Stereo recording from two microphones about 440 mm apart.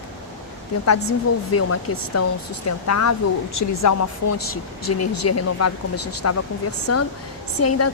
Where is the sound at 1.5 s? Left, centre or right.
Left.